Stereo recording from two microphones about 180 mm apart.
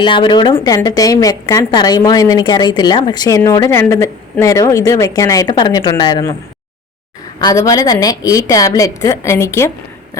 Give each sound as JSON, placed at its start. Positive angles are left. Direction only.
{"t": 0.0, "sound": "a woman's voice", "side_deg": 25}
{"t": 7.3, "sound": "a woman's voice", "side_deg": 20}